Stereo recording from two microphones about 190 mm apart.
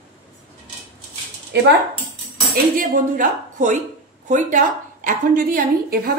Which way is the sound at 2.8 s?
45° right (ahead or behind).